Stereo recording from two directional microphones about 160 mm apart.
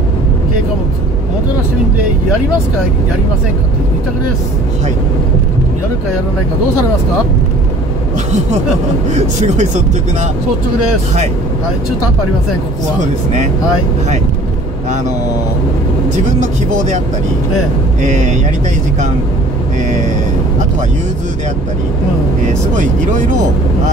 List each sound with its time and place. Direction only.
9.1 s speech: 45° right (ahead or behind)
16.3 s speech: 50° right (ahead or behind)
18.0 s speech: 50° right (ahead or behind)